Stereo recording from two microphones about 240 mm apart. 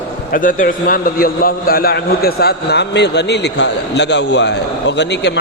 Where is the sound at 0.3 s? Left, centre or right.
Left.